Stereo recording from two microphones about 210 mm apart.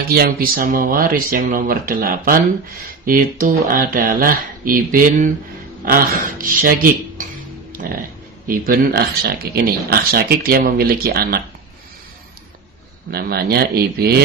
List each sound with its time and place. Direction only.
0.0 s speech: 45° right (ahead or behind)
7.7 s music: 40° right (ahead or behind)
8.5 s speech: 45° right (ahead or behind)
13.1 s speech: 50° right (ahead or behind)